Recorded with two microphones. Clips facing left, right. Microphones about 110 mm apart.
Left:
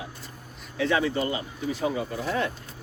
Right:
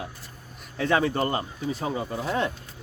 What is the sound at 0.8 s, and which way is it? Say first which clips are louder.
Speech: right 1 dB; 45° right (ahead or behind).